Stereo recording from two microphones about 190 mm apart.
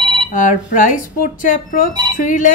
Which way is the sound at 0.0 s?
25° right (ahead or behind).